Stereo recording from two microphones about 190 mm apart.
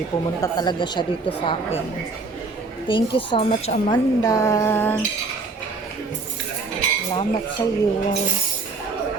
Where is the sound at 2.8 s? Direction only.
25° left (ahead or behind); by 5.0 s 10° left (ahead or behind).